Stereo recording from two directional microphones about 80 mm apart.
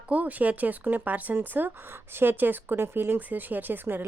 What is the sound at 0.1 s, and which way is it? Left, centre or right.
A woman's voice, centre.